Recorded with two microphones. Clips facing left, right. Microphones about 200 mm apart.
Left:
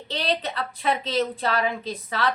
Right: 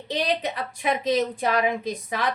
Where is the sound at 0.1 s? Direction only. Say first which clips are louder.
Right 2 dB; 15° right (ahead or behind).